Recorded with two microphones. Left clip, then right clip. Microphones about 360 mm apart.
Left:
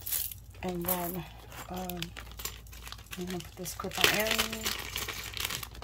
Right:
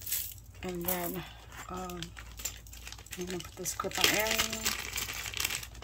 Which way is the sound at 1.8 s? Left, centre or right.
Left.